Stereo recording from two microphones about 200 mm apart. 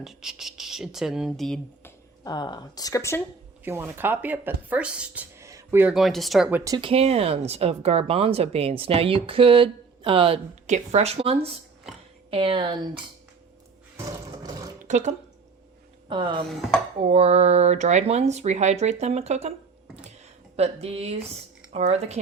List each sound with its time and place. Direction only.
0.0 s speech: centre (ahead or behind)
2.2 s speech: 20° left (ahead or behind)
3.6 s speech: 10° right (ahead or behind)
6.7 s speech: 25° right (ahead or behind)
14.8 s speech: 35° right (ahead or behind)
16.0 s speech: 25° right (ahead or behind)
16.5 s speech: centre (ahead or behind)
17.0 s speech: 30° right (ahead or behind)
20.6 s speech: 30° right (ahead or behind)